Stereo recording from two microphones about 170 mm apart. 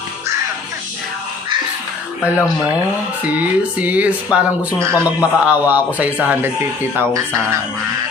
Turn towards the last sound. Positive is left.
turn(degrees=-15)  # may be behind; listen again after turning